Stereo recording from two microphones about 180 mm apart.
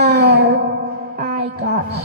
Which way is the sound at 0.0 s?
65° right (ahead or behind).